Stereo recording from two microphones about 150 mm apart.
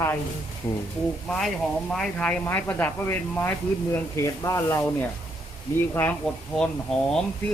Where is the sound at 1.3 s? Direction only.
5° left (ahead or behind); by 4.8 s 20° left (ahead or behind).